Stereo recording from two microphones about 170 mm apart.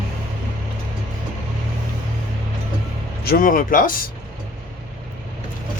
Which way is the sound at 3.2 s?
55° left (ahead or behind).